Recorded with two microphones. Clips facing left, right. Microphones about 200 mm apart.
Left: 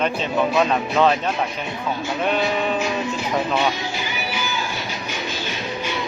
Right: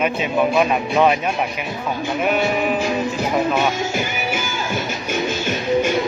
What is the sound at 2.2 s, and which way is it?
Speech, 10° right (ahead or behind).